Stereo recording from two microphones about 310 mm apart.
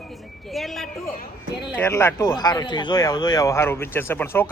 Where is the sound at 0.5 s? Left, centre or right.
Centre.